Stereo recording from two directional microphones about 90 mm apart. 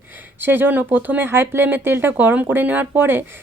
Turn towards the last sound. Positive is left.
turn(degrees=-25)  # may be behind; listen again after turning